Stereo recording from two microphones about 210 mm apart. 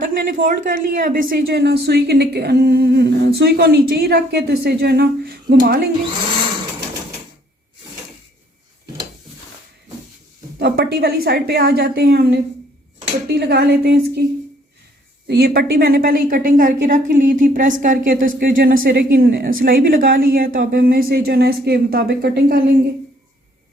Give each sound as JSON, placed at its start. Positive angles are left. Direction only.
{"t": 0.0, "sound": "a woman's voice", "side_deg": -40}
{"t": 10.6, "sound": "a woman's voice", "side_deg": -50}
{"t": 15.3, "sound": "a woman's voice", "side_deg": -50}